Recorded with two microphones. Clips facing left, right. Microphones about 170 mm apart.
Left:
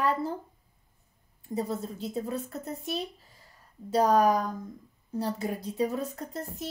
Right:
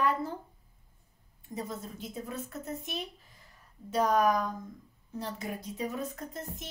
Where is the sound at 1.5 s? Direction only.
35° left (ahead or behind).